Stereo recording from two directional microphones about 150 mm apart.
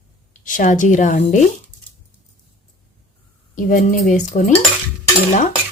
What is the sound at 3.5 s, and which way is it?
Stir, 60° left (ahead or behind).